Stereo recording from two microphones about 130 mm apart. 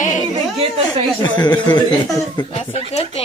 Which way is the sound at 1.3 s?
35° left (ahead or behind).